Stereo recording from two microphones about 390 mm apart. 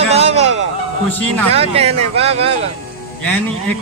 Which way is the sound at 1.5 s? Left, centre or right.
Centre.